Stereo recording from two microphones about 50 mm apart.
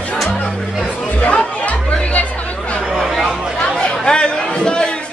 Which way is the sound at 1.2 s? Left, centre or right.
Left.